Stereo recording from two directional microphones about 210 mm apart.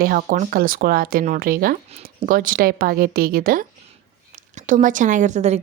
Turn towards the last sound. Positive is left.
turn(degrees=-35)  # may be behind; listen again after turning